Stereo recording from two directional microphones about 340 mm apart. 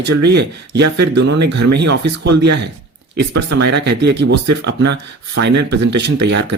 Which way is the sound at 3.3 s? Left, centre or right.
Right.